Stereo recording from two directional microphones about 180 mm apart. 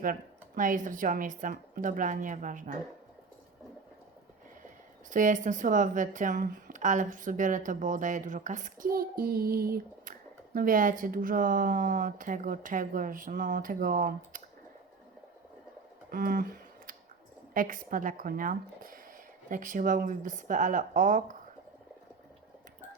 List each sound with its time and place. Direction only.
0.0 s a woman's voice: 50° right (ahead or behind)
5.1 s a woman's voice: 45° right (ahead or behind)
16.1 s a sound: 55° right (ahead or behind)
17.5 s a woman's voice: 50° right (ahead or behind)